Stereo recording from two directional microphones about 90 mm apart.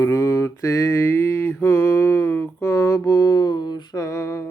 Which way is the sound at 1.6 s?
30° left (ahead or behind).